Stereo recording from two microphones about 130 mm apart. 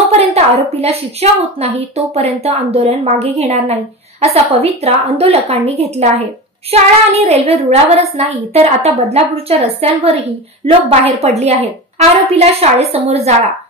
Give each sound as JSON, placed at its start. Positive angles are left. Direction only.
{"t": 0.1, "sound": "a woman's voice", "side_deg": -55}